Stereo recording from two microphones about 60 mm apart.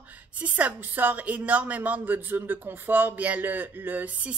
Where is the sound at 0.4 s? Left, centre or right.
Right.